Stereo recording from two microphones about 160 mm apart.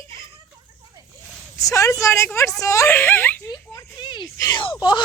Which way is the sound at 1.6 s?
20° left (ahead or behind).